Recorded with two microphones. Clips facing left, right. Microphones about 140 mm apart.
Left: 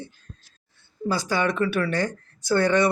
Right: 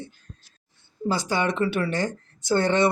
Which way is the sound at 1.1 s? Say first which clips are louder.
Even; 20° right (ahead or behind).